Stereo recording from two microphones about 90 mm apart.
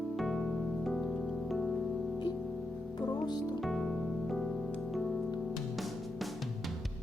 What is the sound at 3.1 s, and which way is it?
Music, 50° left (ahead or behind).